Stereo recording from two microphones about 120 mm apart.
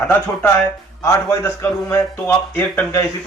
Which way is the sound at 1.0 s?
25° left (ahead or behind).